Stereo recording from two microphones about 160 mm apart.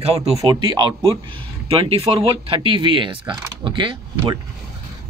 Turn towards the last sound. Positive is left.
turn(degrees=-30)  # may be behind; listen again after turning